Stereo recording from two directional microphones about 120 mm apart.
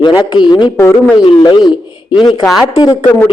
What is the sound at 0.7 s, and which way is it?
Speech, 25° left (ahead or behind).